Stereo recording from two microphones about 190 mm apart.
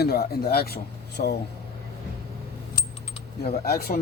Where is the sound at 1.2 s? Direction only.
45° left (ahead or behind).